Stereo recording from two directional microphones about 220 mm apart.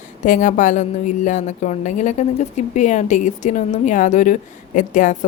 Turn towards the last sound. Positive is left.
turn(degrees=35)  # may be behind; listen again after turning